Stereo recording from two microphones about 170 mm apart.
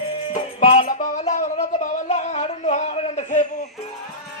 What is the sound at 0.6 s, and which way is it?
Music, 30° left (ahead or behind).